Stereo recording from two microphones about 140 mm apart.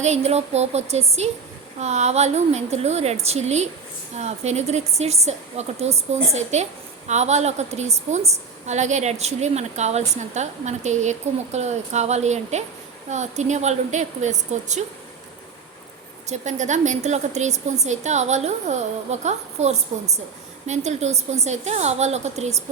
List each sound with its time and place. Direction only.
0.0 s a woman's voice: 50° right (ahead or behind)
16.4 s a woman's voice: 60° right (ahead or behind)